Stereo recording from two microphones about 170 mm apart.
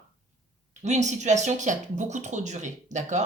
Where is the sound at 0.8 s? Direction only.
45° right (ahead or behind).